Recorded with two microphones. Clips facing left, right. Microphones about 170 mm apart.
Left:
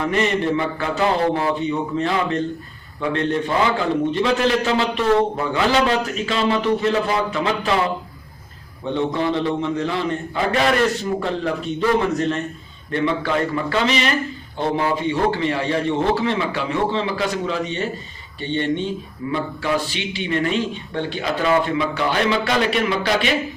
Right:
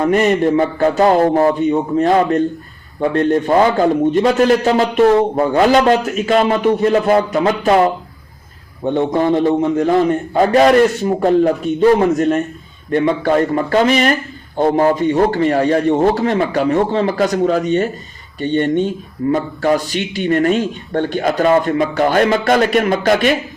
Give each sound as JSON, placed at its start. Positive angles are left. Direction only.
{"t": 0.0, "sound": "a man's voice", "side_deg": -45}